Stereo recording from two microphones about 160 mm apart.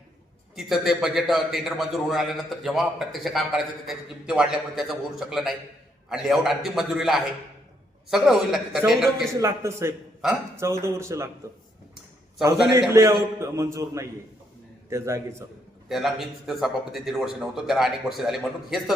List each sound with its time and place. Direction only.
0.5 s a man's voice: centre (ahead or behind)
9.4 s a man's voice: 15° right (ahead or behind)
10.2 s a man's voice: 5° right (ahead or behind)
10.6 s a man's voice: 15° right (ahead or behind)
12.4 s a man's voice: 20° right (ahead or behind)
15.9 s a man's voice: centre (ahead or behind)